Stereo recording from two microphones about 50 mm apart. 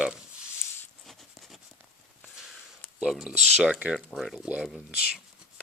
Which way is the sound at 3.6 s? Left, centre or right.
Centre.